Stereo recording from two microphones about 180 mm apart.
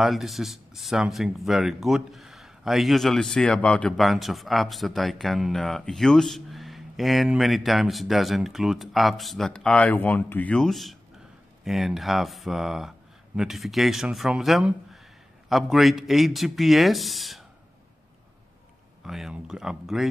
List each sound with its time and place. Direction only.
0.0 s speech: centre (ahead or behind)
19.0 s speech: centre (ahead or behind)